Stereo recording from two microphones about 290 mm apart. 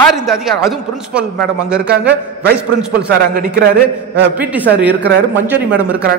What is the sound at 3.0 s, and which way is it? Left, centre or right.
Speech, right.